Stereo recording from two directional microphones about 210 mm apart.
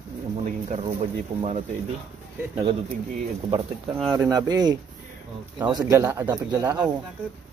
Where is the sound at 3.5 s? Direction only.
25° right (ahead or behind).